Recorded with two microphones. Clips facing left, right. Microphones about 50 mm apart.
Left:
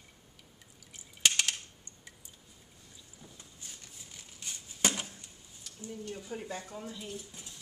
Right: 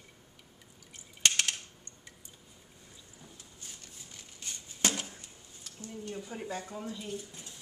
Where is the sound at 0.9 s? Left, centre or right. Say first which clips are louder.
Even; centre.